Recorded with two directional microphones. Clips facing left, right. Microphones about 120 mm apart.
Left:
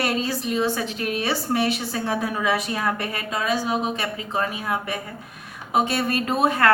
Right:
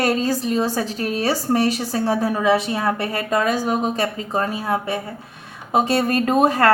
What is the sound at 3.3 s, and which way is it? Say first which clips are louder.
A woman's voice: right 4 dB; 50° right (ahead or behind).